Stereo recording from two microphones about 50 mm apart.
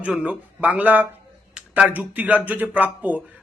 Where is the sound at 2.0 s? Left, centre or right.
Right.